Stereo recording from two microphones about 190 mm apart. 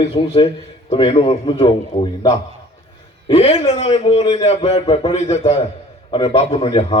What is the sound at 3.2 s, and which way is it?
A man's voice, 30° left (ahead or behind).